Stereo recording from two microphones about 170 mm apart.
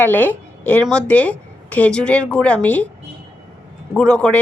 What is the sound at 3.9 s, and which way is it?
Speech, 5° left (ahead or behind).